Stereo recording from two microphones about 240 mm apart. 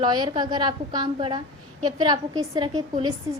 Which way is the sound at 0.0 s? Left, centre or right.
Centre.